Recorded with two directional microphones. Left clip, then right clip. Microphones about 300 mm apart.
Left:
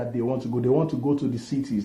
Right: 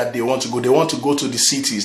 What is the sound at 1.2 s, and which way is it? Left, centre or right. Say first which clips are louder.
Speech: right 10 dB; centre.